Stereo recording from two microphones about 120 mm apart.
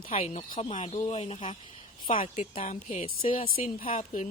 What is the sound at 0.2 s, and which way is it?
Speech, 55° left (ahead or behind).